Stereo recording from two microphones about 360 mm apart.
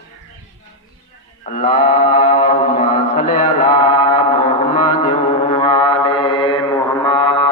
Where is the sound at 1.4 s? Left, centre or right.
Left.